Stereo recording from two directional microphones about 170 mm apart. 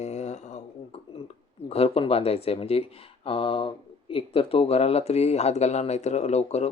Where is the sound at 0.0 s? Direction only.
40° left (ahead or behind).